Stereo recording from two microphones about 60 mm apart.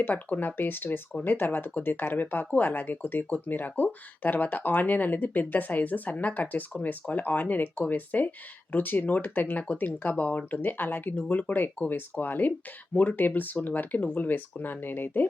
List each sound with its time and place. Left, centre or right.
0.1 s speech: left